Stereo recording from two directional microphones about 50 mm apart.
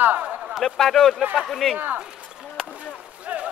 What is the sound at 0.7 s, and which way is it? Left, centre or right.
Speech, centre.